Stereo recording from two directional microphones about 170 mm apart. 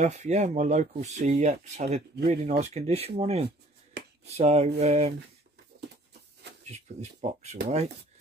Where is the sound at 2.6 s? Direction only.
40° right (ahead or behind).